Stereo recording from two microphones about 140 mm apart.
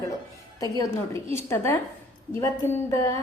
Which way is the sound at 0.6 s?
25° left (ahead or behind).